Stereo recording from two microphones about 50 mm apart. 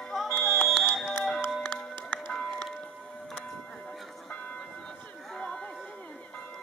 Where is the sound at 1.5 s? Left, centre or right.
Centre.